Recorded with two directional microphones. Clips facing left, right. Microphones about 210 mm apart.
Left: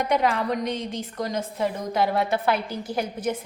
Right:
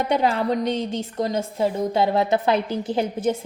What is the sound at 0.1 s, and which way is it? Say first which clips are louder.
A woman's voice: right 3 dB; 30° right (ahead or behind).